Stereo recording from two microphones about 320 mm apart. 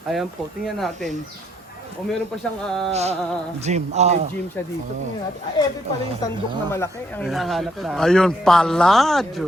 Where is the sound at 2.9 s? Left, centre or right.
Centre.